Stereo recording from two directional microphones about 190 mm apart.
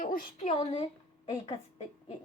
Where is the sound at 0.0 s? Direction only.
50° left (ahead or behind).